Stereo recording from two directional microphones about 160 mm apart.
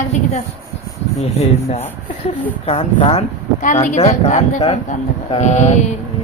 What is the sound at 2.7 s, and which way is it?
Speech, 35° left (ahead or behind).